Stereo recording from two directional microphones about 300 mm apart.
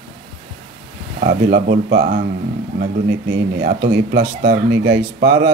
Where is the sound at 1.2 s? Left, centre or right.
Right.